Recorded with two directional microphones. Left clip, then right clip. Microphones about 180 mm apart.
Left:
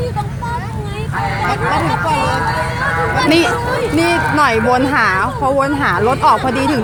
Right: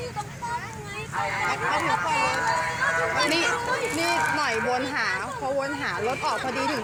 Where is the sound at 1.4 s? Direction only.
50° left (ahead or behind).